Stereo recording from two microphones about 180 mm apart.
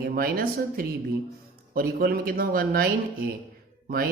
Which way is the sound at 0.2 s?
55° right (ahead or behind).